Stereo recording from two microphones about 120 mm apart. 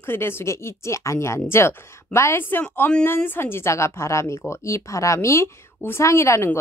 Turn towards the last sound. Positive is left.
turn(degrees=20)  # may be behind; listen again after turning